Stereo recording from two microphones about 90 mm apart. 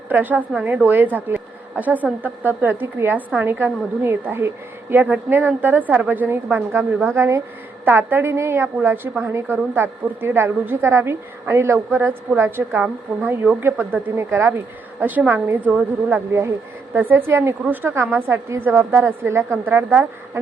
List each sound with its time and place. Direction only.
0.1 s a woman's voice: 20° right (ahead or behind)